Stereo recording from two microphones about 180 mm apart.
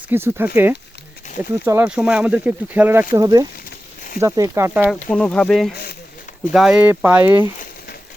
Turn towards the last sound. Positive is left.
turn(degrees=-10)  # may be behind; listen again after turning